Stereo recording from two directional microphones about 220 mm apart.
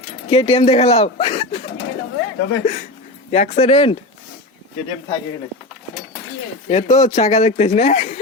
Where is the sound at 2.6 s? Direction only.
35° left (ahead or behind).